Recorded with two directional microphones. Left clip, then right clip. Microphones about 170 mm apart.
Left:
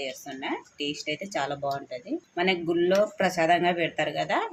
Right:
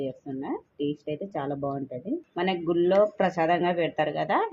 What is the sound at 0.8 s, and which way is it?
Speech, 30° right (ahead or behind).